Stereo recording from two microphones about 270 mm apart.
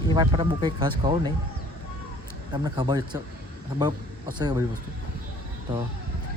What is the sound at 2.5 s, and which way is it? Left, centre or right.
Speech, centre.